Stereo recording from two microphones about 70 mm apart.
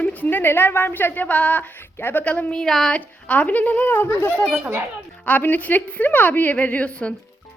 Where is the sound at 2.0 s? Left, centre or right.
Left.